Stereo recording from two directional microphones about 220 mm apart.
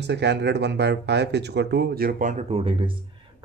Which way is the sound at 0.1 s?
50° right (ahead or behind).